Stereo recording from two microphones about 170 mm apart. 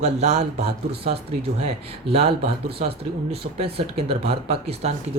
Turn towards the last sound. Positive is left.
turn(degrees=-40)  # may be behind; listen again after turning